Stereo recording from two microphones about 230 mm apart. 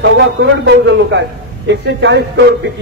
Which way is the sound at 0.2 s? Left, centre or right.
Right.